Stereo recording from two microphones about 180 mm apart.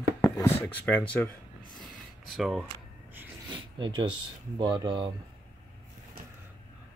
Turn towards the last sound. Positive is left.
turn(degrees=-25)  # may be behind; listen again after turning